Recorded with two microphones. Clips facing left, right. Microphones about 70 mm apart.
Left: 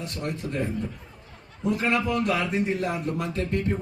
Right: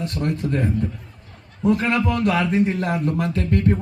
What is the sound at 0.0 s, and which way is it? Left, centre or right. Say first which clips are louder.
Speech: right 7 dB; right.